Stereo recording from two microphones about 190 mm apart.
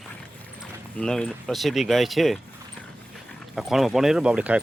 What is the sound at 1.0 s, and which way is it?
Speech, 5° left (ahead or behind).